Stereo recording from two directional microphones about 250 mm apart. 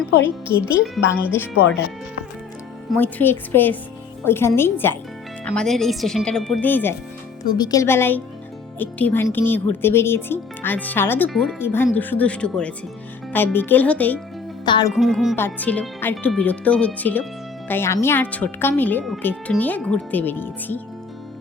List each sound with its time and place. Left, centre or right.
0.8 s speech: centre
3.0 s speech: centre
14.6 s speech: centre
14.9 s speech: centre